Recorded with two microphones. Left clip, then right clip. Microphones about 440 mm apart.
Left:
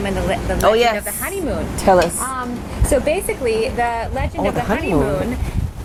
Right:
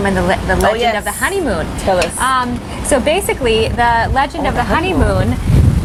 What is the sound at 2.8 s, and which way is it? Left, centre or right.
Speech, centre.